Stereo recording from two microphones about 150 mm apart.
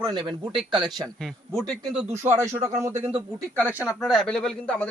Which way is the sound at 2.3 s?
20° right (ahead or behind).